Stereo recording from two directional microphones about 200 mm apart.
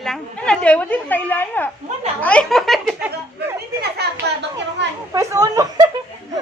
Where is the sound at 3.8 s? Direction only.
55° right (ahead or behind).